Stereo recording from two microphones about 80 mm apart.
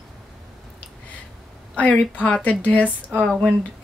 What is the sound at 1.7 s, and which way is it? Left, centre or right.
Speech, centre.